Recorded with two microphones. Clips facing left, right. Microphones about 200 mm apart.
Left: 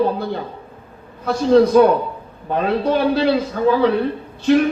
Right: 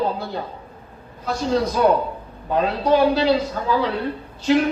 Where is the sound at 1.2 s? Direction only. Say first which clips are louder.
Left 8 dB; 55° left (ahead or behind).